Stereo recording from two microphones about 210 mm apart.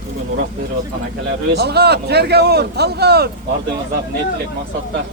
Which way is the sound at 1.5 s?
50° right (ahead or behind).